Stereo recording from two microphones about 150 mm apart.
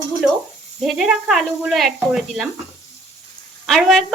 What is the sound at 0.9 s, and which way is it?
Speech, 5° right (ahead or behind).